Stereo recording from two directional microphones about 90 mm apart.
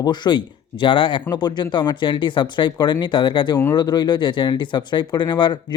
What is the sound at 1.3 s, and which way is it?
Speech, 50° left (ahead or behind).